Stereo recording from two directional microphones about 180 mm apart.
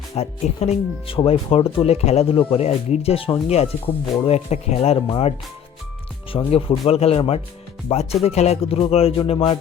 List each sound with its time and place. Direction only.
0.2 s speech: 35° left (ahead or behind)
6.3 s speech: 30° left (ahead or behind)